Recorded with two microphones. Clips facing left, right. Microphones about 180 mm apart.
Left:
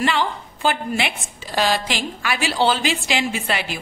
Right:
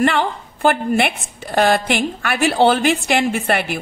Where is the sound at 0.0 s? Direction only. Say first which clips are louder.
Right 4 dB; 55° right (ahead or behind).